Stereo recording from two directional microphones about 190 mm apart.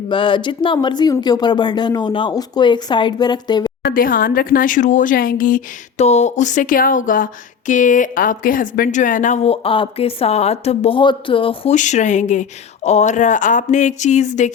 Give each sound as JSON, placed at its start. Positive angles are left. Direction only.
{"t": 0.1, "sound": "speech", "side_deg": 25}
{"t": 3.8, "sound": "a woman's voice", "side_deg": 50}